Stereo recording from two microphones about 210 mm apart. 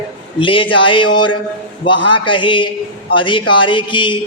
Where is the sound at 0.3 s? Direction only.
25° left (ahead or behind).